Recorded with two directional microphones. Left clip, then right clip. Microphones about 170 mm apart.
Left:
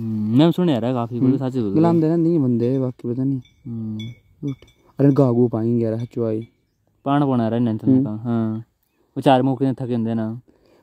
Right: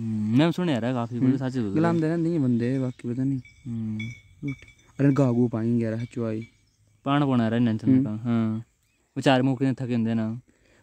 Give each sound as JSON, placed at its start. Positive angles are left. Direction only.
{"t": 0.0, "sound": "speech", "side_deg": 5}
{"t": 3.9, "sound": "speech", "side_deg": -10}
{"t": 4.6, "sound": "speech", "side_deg": 5}
{"t": 7.0, "sound": "speech", "side_deg": -5}